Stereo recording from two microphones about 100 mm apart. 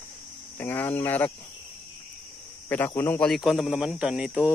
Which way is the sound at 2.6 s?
20° left (ahead or behind).